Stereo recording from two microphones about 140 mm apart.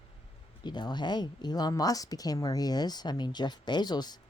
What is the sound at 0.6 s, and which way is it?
A woman's voice, 30° left (ahead or behind).